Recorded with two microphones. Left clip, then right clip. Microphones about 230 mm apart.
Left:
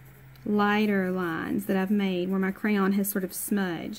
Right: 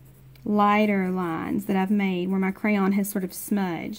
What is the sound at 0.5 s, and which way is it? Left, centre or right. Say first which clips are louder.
A woman's voice: right 4 dB; right.